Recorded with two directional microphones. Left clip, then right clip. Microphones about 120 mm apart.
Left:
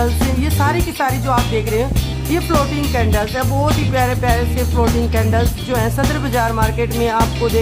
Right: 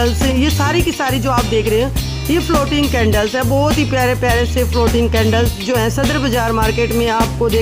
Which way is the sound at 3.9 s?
40° right (ahead or behind).